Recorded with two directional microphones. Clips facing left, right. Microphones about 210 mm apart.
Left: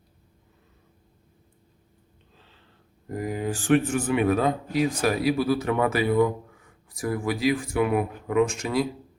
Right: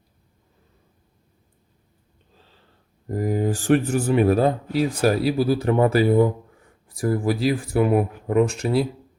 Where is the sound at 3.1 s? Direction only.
40° right (ahead or behind).